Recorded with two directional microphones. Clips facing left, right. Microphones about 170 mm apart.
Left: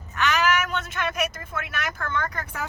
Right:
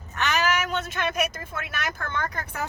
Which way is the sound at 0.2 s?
30° right (ahead or behind).